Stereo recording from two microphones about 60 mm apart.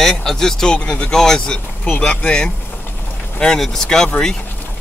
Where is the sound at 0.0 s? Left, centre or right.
Centre.